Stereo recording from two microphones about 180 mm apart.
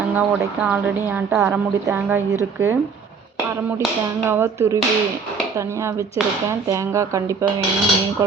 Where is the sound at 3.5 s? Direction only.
15° right (ahead or behind).